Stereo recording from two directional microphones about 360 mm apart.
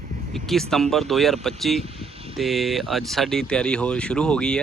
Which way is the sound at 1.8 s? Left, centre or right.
Centre.